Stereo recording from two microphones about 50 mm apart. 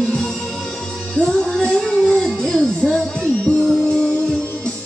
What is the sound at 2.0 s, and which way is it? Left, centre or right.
Dog, centre.